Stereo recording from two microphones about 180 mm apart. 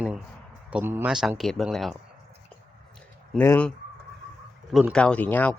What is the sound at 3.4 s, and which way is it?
Speech, 10° left (ahead or behind).